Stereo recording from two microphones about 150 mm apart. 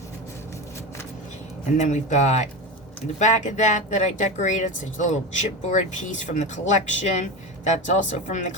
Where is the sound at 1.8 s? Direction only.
50° left (ahead or behind).